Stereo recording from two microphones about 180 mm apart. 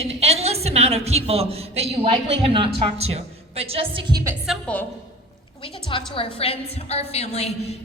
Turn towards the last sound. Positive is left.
turn(degrees=35)  # may be behind; listen again after turning